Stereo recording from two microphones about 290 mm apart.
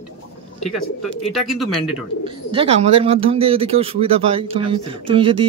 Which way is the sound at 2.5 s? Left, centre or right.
Centre.